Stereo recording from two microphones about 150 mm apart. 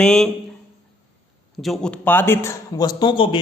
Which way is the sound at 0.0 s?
5° left (ahead or behind).